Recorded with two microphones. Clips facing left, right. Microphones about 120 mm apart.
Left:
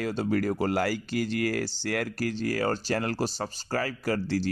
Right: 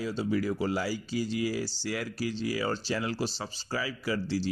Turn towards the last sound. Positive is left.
turn(degrees=50)  # may be behind; listen again after turning